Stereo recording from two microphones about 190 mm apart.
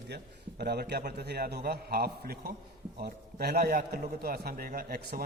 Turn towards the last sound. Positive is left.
turn(degrees=-50)  # may be behind; listen again after turning